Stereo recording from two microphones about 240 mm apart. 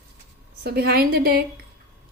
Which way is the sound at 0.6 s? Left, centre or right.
Right.